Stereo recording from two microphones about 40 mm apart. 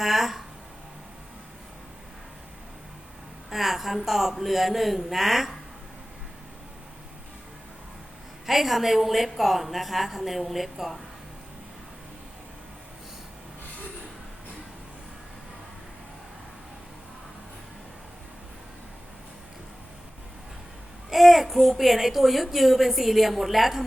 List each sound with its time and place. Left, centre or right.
0.0 s a man's voice: centre
3.5 s a man's voice: centre
8.4 s a child's voice: centre
21.1 s a child's voice: centre